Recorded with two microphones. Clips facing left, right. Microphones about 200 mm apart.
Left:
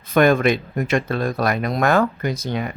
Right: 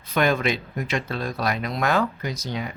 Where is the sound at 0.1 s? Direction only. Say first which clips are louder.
Left 6 dB; 50° left (ahead or behind).